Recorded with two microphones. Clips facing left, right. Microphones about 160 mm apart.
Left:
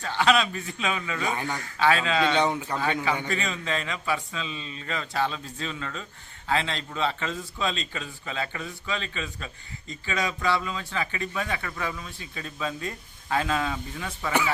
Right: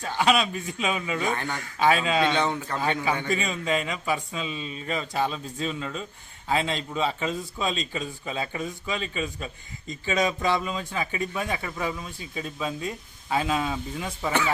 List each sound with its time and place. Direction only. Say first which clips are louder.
0.0 s speech: even; 15° right (ahead or behind)
1.3 s speech: right 1 dB; 10° left (ahead or behind)
1.8 s speech: right 1 dB; 15° right (ahead or behind)
2.4 s speech: left 1 dB; 10° left (ahead or behind)
3.2 s a man's voice: right 3 dB; 10° right (ahead or behind)